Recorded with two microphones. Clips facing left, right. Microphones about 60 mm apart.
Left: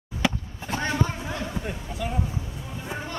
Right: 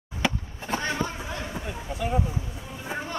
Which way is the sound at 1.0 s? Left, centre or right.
Centre.